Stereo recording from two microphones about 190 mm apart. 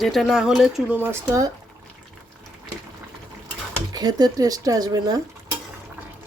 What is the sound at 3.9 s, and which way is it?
Speech, 20° right (ahead or behind).